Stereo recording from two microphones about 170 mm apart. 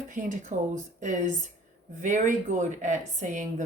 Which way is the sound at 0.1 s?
50° right (ahead or behind).